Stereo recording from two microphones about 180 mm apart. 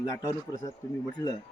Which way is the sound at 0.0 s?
20° left (ahead or behind).